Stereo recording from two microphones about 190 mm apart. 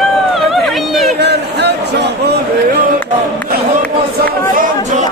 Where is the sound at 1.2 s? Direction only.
60° right (ahead or behind).